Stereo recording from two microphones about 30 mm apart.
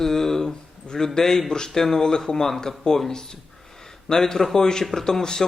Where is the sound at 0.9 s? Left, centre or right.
Left.